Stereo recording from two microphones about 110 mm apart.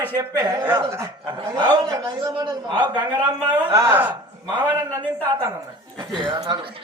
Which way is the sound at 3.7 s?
25° right (ahead or behind).